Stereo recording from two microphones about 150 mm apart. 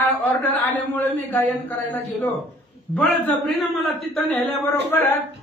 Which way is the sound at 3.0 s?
Centre (ahead or behind).